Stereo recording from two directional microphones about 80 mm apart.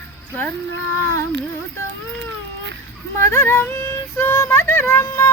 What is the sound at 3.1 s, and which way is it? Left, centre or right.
Music, left.